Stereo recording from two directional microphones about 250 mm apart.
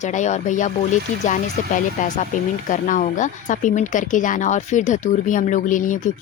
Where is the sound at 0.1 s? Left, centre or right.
Left.